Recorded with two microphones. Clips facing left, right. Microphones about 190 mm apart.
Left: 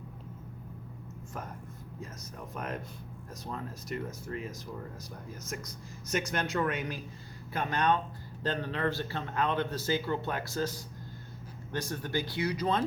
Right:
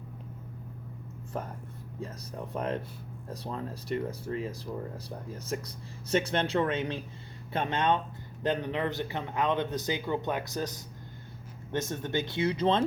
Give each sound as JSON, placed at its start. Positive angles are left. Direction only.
{"t": 2.5, "sound": "speech", "side_deg": -30}